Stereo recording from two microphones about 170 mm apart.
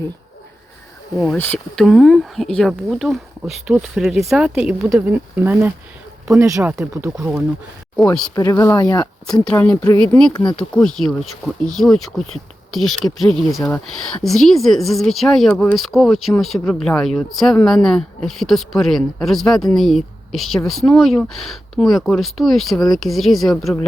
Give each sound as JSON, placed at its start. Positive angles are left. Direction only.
{"t": 1.5, "sound": "speech", "side_deg": 0}
{"t": 8.4, "sound": "speech", "side_deg": 20}
{"t": 9.3, "sound": "speech", "side_deg": 5}
{"t": 10.3, "sound": "speech", "side_deg": 25}
{"t": 10.6, "sound": "speech", "side_deg": 5}